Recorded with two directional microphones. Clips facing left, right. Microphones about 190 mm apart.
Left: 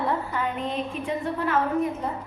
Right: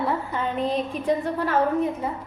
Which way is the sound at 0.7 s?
35° right (ahead or behind).